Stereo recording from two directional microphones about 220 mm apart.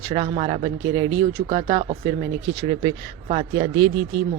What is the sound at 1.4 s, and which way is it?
Speech, 25° right (ahead or behind).